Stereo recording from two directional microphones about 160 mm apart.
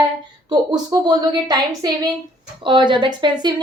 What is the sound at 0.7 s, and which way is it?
A woman's voice, 25° right (ahead or behind).